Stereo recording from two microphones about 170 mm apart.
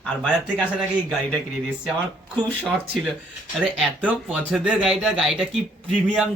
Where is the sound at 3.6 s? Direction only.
5° right (ahead or behind).